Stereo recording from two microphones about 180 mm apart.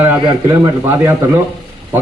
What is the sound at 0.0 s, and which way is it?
A man's voice, 10° right (ahead or behind).